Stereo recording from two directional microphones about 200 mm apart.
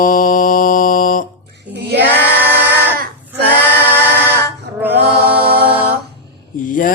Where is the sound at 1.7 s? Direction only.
60° right (ahead or behind).